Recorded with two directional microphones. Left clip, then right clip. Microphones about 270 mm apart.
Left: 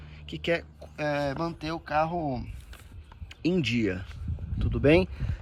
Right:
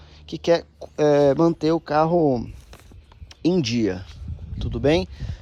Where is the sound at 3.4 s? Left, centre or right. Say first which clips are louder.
Right 6 dB; centre.